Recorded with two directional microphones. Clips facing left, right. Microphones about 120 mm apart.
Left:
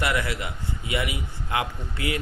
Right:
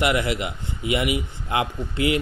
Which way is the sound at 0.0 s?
20° right (ahead or behind).